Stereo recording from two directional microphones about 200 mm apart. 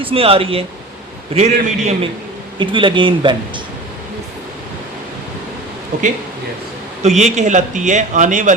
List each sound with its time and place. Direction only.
0.0 s speech: 30° right (ahead or behind)
7.0 s speech: 35° right (ahead or behind)